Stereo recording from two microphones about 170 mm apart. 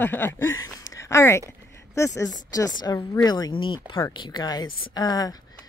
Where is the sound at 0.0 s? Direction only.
10° left (ahead or behind).